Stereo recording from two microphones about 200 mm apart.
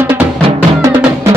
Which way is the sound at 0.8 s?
15° right (ahead or behind).